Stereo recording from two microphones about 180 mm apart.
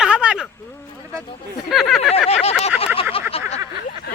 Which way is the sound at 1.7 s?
Centre (ahead or behind).